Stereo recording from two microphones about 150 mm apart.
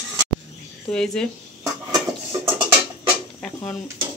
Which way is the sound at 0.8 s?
5° left (ahead or behind).